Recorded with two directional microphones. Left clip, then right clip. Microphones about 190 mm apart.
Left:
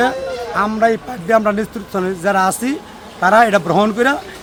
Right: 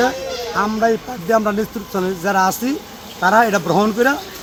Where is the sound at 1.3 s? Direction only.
5° left (ahead or behind).